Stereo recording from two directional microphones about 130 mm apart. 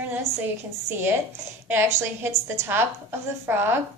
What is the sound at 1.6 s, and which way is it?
A woman's voice, 20° right (ahead or behind).